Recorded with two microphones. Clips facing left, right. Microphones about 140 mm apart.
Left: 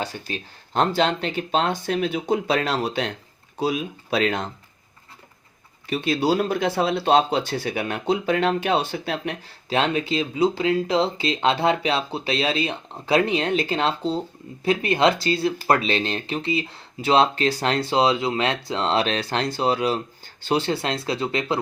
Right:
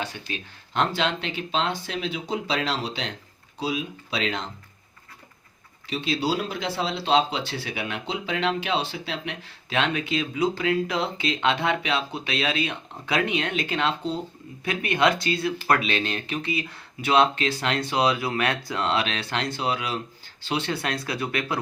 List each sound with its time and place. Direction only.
0.0 s speech: 35° left (ahead or behind)
5.8 s speech: 50° left (ahead or behind); by 21.6 s 25° left (ahead or behind)